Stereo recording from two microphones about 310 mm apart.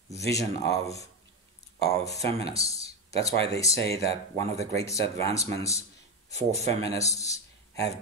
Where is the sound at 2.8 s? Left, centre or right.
Centre.